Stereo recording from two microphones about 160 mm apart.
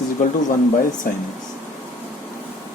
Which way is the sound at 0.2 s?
50° left (ahead or behind).